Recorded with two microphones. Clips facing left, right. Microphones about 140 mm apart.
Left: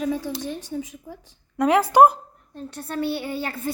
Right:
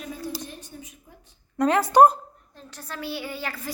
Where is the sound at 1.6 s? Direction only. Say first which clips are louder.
Left 1 dB; 10° left (ahead or behind).